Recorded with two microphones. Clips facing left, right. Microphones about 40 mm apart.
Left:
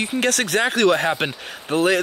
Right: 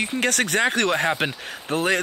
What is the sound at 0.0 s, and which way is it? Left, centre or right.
Speech, centre.